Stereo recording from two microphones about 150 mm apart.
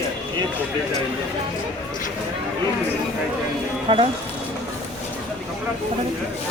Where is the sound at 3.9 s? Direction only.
35° right (ahead or behind).